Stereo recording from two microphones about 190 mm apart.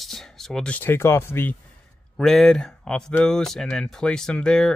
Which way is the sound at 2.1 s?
Centre (ahead or behind).